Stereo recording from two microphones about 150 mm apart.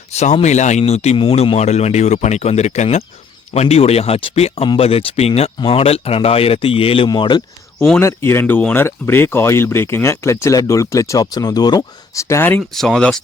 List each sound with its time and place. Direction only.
0.1 s speech: 45° left (ahead or behind); by 7.4 s 30° left (ahead or behind)
7.9 s speech: 15° left (ahead or behind)
12.7 s speech: centre (ahead or behind)